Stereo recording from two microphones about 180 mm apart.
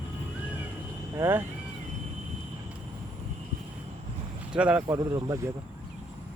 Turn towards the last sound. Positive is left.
turn(degrees=-20)  # may be behind; listen again after turning